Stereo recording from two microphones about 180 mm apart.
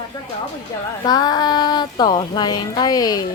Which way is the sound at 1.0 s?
20° left (ahead or behind).